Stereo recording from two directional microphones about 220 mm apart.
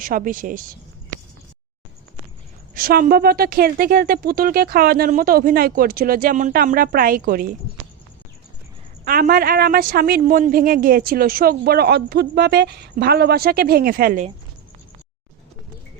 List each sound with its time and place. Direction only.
0.0 s a woman's voice: 40° right (ahead or behind)
2.7 s a woman's voice: 40° right (ahead or behind)
9.0 s a woman's voice: 40° right (ahead or behind)